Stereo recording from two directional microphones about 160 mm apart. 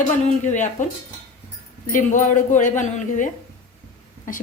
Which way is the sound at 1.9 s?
55° left (ahead or behind).